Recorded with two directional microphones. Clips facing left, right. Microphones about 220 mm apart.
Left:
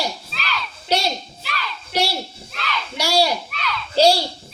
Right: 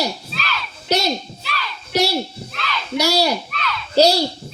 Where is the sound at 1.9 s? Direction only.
45° right (ahead or behind).